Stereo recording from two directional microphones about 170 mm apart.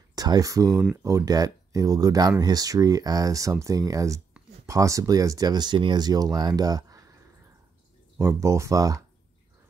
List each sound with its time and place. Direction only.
0.1 s speech: 20° right (ahead or behind)
8.2 s speech: 15° right (ahead or behind)